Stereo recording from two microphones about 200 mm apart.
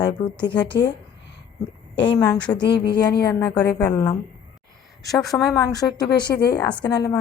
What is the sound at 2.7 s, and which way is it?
Speech, 55° left (ahead or behind).